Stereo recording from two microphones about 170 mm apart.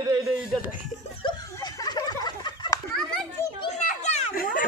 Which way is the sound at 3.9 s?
40° left (ahead or behind).